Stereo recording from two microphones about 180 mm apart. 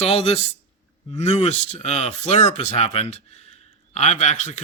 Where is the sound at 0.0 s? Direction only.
35° left (ahead or behind).